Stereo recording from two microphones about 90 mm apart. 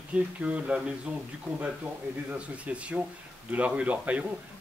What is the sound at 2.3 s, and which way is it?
Speech, 15° right (ahead or behind).